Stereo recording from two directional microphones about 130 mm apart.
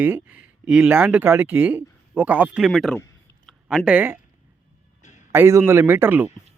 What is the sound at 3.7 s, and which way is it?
Speech, 10° right (ahead or behind).